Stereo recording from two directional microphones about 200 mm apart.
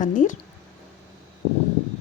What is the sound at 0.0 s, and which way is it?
Speech, 40° left (ahead or behind).